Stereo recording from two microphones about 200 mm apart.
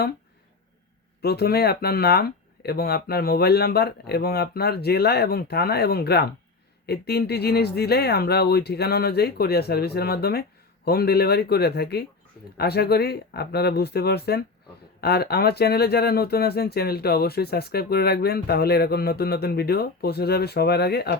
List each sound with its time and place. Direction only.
1.2 s speech: 50° left (ahead or behind)